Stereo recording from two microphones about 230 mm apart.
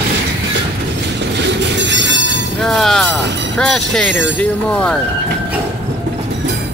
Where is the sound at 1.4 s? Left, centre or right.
Right.